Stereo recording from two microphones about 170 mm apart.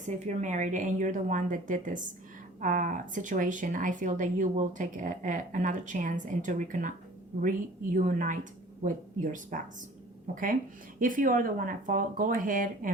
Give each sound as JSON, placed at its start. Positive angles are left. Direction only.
{"t": 0.0, "sound": "speech", "side_deg": -45}